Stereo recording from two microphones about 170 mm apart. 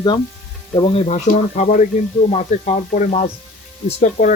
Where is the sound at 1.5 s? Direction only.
50° left (ahead or behind).